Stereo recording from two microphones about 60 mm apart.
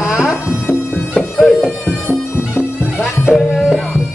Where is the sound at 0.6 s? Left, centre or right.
Left.